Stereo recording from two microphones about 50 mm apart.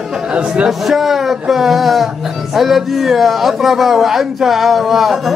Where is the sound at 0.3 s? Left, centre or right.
Right.